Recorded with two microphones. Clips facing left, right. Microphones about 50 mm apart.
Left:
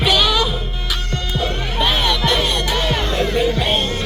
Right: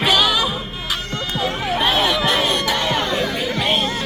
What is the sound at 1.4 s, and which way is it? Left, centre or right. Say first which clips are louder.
Music: right 1 dB; centre.